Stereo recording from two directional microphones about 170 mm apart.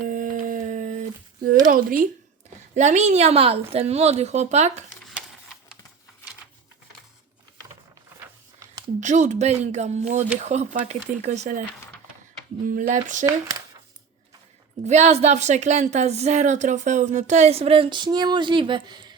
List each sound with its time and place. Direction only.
0.0 s a sound: 50° right (ahead or behind)
1.6 s speech: 50° right (ahead or behind)
9.0 s speech: 45° right (ahead or behind)
12.6 s speech: 50° right (ahead or behind)
13.2 s speech: 20° right (ahead or behind)
14.8 s speech: 40° right (ahead or behind)